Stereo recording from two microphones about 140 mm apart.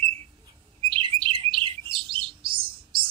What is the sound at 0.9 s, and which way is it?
Bird, 35° right (ahead or behind).